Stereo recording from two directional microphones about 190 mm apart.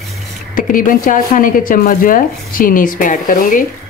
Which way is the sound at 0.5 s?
45° left (ahead or behind).